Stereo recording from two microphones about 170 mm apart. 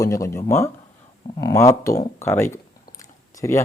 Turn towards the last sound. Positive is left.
turn(degrees=20)  # may be behind; listen again after turning